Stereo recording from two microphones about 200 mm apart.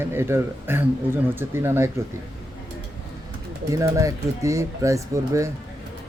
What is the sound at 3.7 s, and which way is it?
Speech, 15° right (ahead or behind).